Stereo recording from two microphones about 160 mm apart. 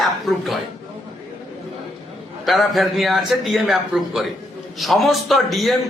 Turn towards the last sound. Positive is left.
turn(degrees=0)  # may be behind; listen again after turning